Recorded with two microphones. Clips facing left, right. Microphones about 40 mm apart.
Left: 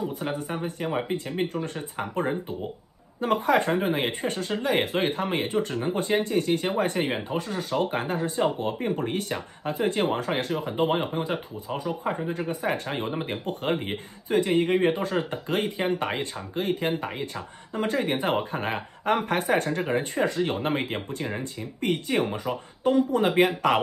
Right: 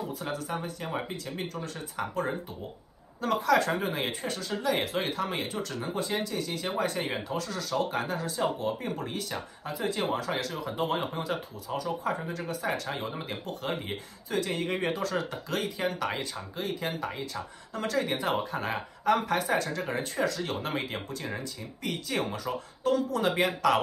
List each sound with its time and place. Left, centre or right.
0.2 s speech: left
21.4 s speech: left